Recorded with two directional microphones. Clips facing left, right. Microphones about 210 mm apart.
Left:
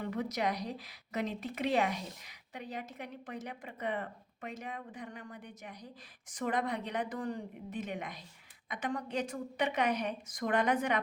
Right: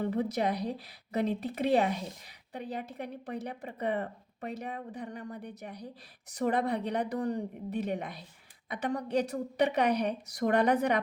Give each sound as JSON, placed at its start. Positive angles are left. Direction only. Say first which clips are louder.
{"t": 0.0, "sound": "speech", "louder": "right 5 dB", "side_deg": -30}